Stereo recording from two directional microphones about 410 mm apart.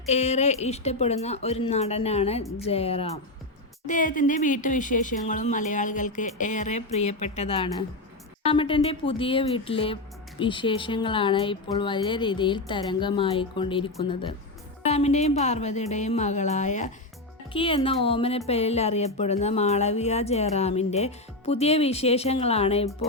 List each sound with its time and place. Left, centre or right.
0.0 s speech: centre